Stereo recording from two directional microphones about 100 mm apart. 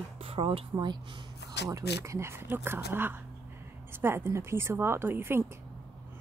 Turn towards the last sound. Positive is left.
turn(degrees=-25)  # may be behind; listen again after turning